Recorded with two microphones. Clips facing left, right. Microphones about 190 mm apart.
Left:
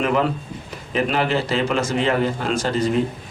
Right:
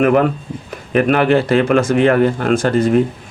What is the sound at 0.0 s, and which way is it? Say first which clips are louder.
Speech: right 7 dB; 55° right (ahead or behind).